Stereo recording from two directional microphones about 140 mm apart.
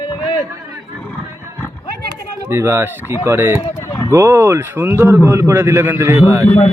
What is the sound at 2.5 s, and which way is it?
A man's voice, 20° right (ahead or behind).